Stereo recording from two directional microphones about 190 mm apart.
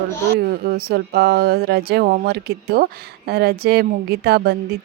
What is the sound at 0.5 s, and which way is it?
Speech, 55° right (ahead or behind).